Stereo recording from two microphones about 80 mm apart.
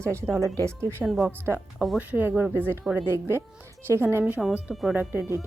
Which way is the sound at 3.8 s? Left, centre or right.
Right.